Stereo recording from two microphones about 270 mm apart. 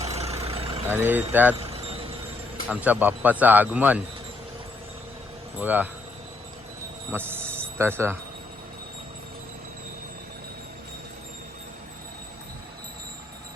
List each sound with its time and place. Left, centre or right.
0.0 s vehicle: right
0.9 s speech: centre
1.5 s a sound: right
2.6 s a man's voice: centre
5.5 s speech: centre
7.1 s speech: centre